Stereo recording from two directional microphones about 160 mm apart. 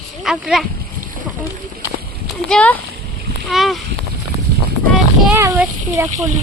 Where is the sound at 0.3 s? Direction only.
5° right (ahead or behind).